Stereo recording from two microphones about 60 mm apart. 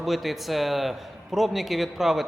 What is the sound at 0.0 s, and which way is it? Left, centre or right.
A man's voice, centre.